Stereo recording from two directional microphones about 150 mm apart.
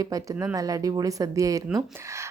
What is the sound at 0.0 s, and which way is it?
Speech, 25° right (ahead or behind).